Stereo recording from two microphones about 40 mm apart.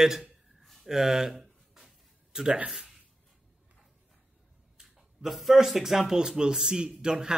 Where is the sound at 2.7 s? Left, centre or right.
Centre.